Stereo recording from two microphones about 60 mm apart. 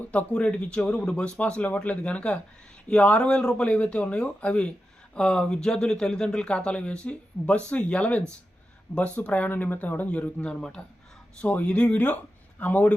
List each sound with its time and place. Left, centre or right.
0.0 s a man's voice: left